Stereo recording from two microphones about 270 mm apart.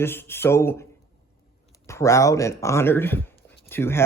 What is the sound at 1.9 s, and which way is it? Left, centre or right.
Speech, centre.